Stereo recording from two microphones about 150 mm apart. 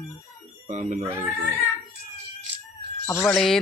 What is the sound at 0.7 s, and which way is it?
Speech, 50° right (ahead or behind).